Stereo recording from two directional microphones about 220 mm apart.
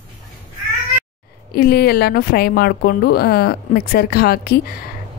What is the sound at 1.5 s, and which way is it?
A woman's voice, 45° left (ahead or behind).